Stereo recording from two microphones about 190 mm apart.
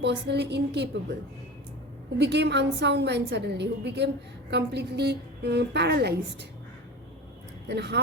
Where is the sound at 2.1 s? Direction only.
65° right (ahead or behind).